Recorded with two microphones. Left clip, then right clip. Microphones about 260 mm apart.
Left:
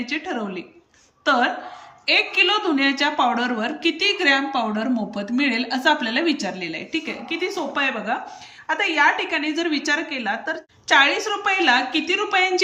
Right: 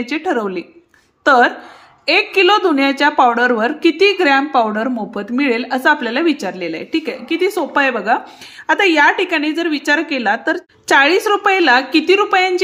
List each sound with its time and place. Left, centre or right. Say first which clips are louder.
0.0 s a woman's voice: right 8 dB; right